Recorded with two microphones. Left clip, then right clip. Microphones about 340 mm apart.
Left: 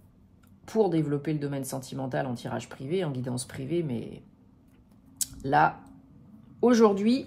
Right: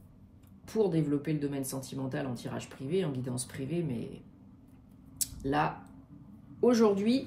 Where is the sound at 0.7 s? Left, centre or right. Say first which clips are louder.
Left 4 dB; left.